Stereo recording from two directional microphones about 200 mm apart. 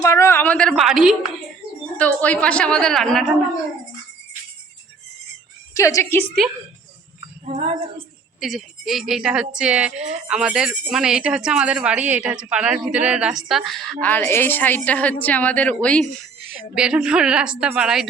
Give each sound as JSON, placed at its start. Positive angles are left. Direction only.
{"t": 0.0, "sound": "a woman's voice", "side_deg": 15}
{"t": 5.7, "sound": "a woman's voice", "side_deg": 15}
{"t": 7.4, "sound": "female singing", "side_deg": -35}
{"t": 8.4, "sound": "a woman's voice", "side_deg": 0}